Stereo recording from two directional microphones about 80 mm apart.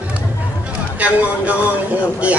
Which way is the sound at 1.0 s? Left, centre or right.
Centre.